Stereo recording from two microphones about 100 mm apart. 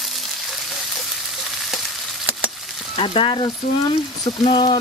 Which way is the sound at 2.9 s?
65° left (ahead or behind).